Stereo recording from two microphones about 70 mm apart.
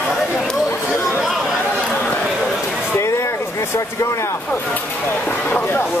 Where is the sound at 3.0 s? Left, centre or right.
Left.